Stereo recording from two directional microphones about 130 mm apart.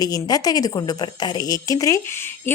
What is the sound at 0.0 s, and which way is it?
A woman's voice, 30° left (ahead or behind).